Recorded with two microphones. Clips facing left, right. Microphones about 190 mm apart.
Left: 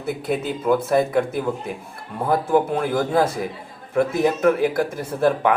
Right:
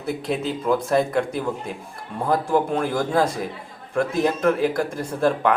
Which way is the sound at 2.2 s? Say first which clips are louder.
Left 2 dB; 5° left (ahead or behind).